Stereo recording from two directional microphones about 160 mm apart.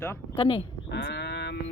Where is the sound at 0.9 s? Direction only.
90° left.